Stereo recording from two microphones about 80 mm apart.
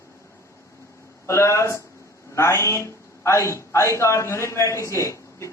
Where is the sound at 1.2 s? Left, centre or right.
Left.